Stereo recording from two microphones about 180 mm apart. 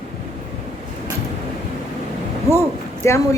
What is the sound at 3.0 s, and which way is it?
Speech, 15° left (ahead or behind).